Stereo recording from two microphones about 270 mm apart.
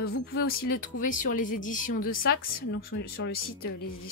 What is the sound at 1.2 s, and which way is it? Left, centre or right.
A woman's voice, left.